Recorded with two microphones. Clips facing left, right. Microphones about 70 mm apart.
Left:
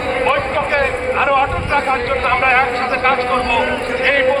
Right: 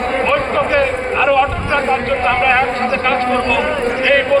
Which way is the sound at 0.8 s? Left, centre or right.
Left.